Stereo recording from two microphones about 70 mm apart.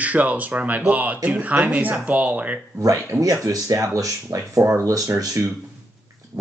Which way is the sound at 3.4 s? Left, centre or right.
Right.